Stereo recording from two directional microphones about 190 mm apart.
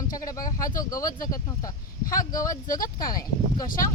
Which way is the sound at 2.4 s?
45° left (ahead or behind).